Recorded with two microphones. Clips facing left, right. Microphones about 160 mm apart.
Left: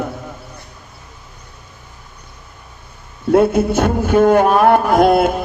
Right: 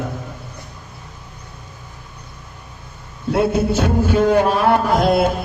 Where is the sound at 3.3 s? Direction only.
50° left (ahead or behind).